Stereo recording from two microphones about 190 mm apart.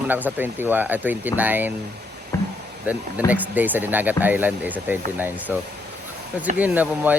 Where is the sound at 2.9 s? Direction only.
10° right (ahead or behind).